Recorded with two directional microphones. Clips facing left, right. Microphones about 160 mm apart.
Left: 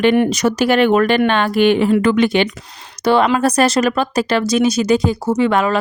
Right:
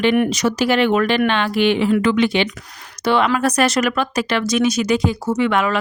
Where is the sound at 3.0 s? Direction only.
35° left (ahead or behind).